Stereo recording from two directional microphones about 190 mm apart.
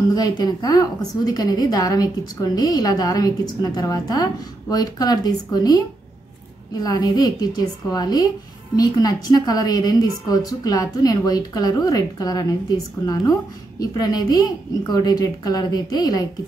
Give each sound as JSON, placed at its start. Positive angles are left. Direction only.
{"t": 0.1, "sound": "a woman's voice", "side_deg": 20}
{"t": 6.8, "sound": "a woman's voice", "side_deg": 20}
{"t": 13.7, "sound": "a woman's voice", "side_deg": 20}